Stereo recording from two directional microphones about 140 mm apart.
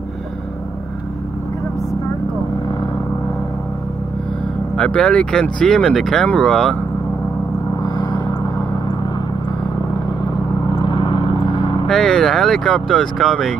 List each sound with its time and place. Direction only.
4.7 s speech: 10° left (ahead or behind)
7.8 s vehicle: 30° left (ahead or behind)
10.7 s vehicle: 35° left (ahead or behind)
11.9 s speech: 5° left (ahead or behind)